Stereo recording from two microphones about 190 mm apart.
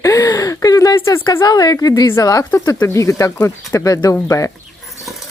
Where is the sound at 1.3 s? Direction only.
20° left (ahead or behind).